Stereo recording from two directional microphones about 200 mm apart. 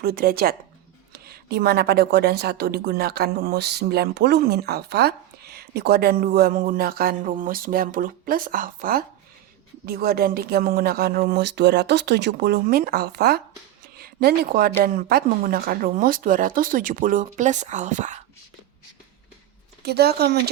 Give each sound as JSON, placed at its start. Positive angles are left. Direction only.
{"t": 0.0, "sound": "a woman's voice", "side_deg": -50}
{"t": 13.9, "sound": "a sound", "side_deg": -50}
{"t": 14.8, "sound": "a woman's voice", "side_deg": -45}
{"t": 19.8, "sound": "a woman's voice", "side_deg": -55}